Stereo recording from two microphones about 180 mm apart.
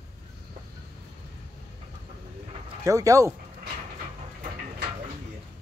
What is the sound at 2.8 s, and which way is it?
Speech, 15° right (ahead or behind).